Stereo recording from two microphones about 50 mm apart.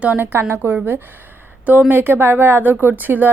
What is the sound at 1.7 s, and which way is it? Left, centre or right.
A woman's voice, right.